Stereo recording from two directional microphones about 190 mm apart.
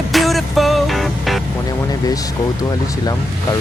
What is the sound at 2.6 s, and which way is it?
Speech, 20° left (ahead or behind).